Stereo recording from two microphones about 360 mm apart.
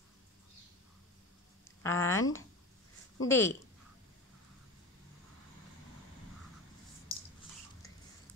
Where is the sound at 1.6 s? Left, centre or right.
Centre.